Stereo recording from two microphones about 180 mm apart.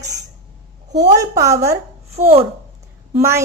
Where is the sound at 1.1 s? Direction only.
20° right (ahead or behind).